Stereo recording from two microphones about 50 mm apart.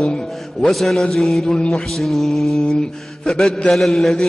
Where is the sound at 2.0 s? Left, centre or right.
Centre.